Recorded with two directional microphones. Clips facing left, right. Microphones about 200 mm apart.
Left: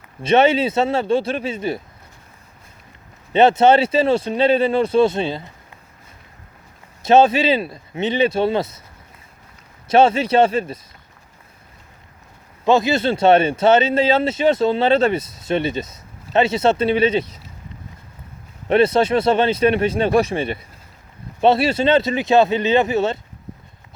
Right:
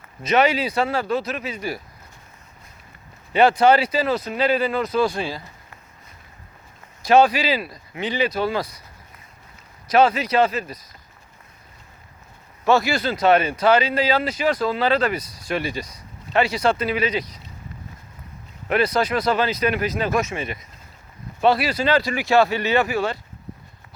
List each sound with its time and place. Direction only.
0.2 s speech: 30° left (ahead or behind)
3.3 s speech: 25° left (ahead or behind)
7.0 s speech: 25° left (ahead or behind)
9.9 s speech: 25° left (ahead or behind)
12.6 s speech: 20° left (ahead or behind)
18.7 s speech: 25° left (ahead or behind)